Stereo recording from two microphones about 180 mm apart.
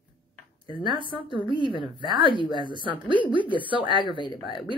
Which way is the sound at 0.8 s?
25° right (ahead or behind).